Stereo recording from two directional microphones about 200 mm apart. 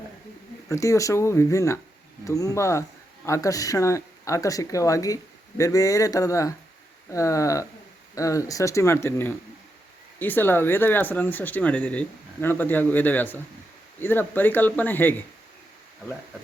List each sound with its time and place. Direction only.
0.7 s speech: 15° left (ahead or behind)